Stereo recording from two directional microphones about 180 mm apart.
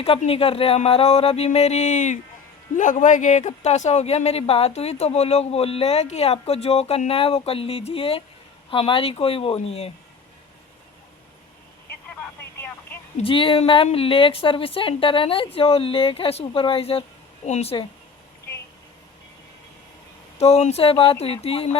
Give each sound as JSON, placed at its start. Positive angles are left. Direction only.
{"t": 0.0, "sound": "speech", "side_deg": 35}
{"t": 13.1, "sound": "speech", "side_deg": 30}
{"t": 20.4, "sound": "speech", "side_deg": 35}